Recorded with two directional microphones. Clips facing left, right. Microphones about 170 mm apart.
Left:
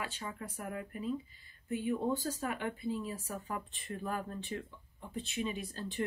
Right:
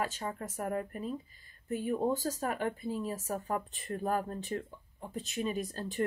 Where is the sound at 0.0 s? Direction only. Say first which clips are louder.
Right 6 dB; 40° right (ahead or behind).